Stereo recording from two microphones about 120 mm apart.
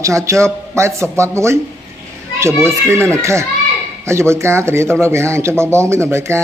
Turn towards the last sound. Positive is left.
turn(degrees=-20)  # may be behind; listen again after turning